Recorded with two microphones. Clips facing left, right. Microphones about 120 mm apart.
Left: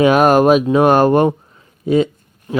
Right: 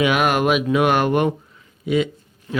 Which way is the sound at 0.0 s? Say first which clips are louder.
Left 7 dB; 35° left (ahead or behind).